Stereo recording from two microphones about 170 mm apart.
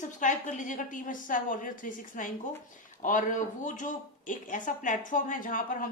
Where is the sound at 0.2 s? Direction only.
50° left (ahead or behind).